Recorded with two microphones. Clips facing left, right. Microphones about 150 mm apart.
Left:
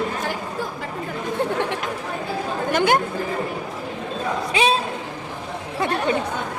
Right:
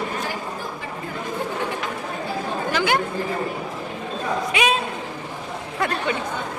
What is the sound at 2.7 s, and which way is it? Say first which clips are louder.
Chatter: left 4 dB; 50° left (ahead or behind).